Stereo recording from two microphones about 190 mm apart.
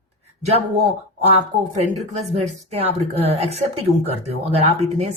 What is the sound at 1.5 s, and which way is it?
Speech, 40° right (ahead or behind).